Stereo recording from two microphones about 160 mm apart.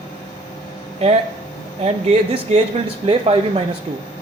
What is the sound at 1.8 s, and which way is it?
Speech, 40° right (ahead or behind).